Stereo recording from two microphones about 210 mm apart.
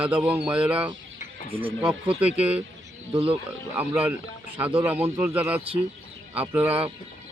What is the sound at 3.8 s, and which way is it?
Speech, 10° right (ahead or behind).